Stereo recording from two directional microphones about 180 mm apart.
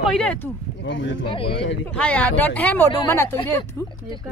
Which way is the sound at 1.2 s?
30° left (ahead or behind).